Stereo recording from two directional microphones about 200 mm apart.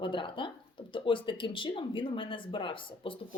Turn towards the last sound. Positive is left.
turn(degrees=25)  # may be behind; listen again after turning